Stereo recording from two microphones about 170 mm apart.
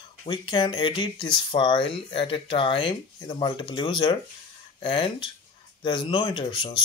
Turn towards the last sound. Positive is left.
turn(degrees=25)  # may be behind; listen again after turning